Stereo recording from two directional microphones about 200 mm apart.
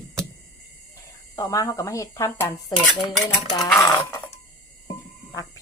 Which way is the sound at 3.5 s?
15° left (ahead or behind).